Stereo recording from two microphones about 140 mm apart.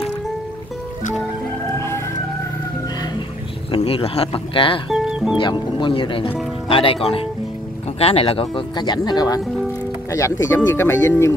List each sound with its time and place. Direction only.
3.7 s speech: 45° left (ahead or behind)
4.8 s music: centre (ahead or behind)
5.4 s speech: 35° left (ahead or behind); by 11.3 s 20° left (ahead or behind)